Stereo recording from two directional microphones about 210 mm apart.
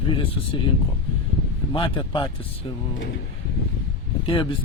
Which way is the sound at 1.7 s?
25° left (ahead or behind).